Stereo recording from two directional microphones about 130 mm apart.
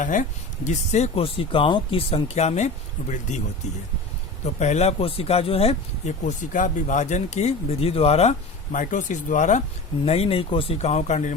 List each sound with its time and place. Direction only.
0.0 s speech: 80° left; by 3.4 s 65° left (ahead or behind)
4.6 s speech: 60° left (ahead or behind)
10.1 s speech: 50° left (ahead or behind); by 11.3 s 65° left (ahead or behind)